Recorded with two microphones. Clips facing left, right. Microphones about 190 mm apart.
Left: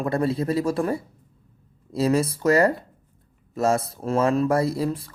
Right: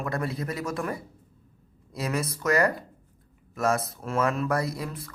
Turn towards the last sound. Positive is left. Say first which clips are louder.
# left 8 dB
turn(degrees=30)  # may be behind; listen again after turning